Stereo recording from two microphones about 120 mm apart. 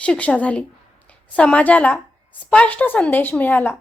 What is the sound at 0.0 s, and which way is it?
A woman's voice, 10° left (ahead or behind).